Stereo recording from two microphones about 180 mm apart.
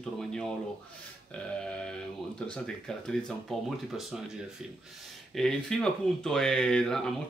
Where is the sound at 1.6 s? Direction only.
5° left (ahead or behind).